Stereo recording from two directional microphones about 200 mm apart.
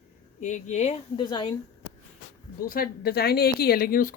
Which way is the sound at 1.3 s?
20° left (ahead or behind).